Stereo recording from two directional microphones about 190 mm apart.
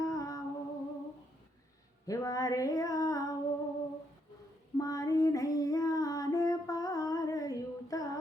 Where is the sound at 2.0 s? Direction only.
15° left (ahead or behind).